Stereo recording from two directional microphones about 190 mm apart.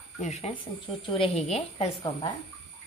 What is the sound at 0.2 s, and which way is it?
A woman's voice, 35° left (ahead or behind).